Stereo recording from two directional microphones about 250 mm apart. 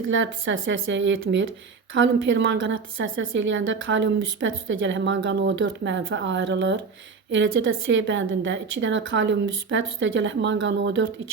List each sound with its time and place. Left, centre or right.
0.1 s a woman's voice: right